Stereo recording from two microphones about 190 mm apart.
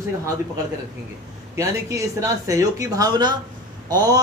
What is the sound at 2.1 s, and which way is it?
A man's voice, 15° right (ahead or behind).